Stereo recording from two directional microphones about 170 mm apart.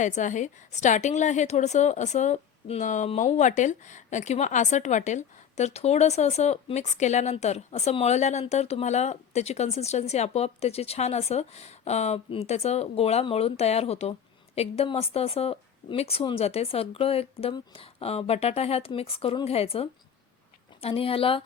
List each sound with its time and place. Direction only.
0.0 s a woman's voice: 45° left (ahead or behind)